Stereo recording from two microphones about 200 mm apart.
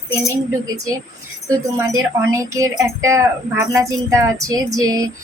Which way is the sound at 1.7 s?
15° right (ahead or behind).